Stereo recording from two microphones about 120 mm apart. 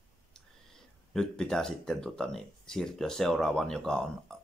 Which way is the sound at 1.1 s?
5° left (ahead or behind).